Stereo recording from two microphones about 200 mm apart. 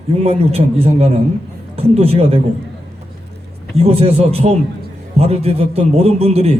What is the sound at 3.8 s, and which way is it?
A man's voice, 30° right (ahead or behind).